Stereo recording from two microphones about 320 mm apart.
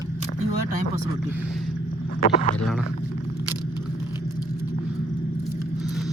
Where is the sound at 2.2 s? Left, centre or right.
Left.